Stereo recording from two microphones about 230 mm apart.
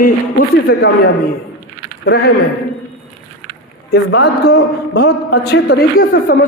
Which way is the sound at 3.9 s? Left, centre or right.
Left.